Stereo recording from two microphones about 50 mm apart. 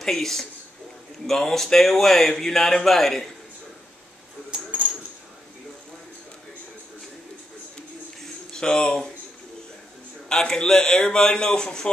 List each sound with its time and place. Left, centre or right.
0.0 s a man's voice: centre
4.5 s coin: right
8.5 s speech: centre
10.2 s a man's voice: centre